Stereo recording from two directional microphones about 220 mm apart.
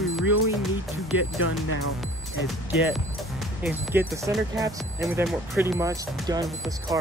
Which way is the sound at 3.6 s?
10° right (ahead or behind).